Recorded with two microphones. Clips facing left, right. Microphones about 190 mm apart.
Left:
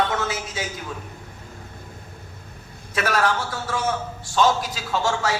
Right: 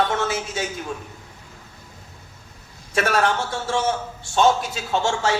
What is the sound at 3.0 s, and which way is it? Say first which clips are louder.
Speech: right 2 dB; 25° right (ahead or behind).